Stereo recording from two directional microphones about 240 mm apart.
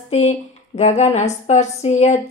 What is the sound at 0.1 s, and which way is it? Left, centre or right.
Speech, left.